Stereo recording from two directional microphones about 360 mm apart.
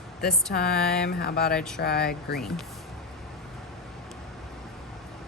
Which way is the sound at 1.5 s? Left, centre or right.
Centre.